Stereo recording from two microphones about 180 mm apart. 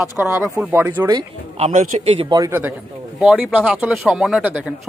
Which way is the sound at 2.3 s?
15° right (ahead or behind).